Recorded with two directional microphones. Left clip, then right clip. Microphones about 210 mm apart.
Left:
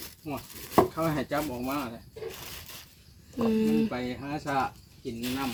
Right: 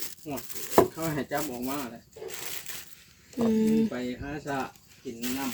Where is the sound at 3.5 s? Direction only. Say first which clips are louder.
Right 1 dB; 5° right (ahead or behind).